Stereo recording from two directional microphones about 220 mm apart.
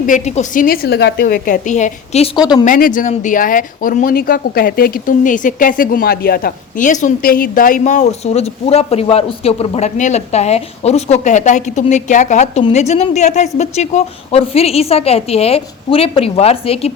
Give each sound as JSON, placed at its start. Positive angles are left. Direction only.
{"t": 0.0, "sound": "speech", "side_deg": 35}
{"t": 2.6, "sound": "a woman's voice", "side_deg": 40}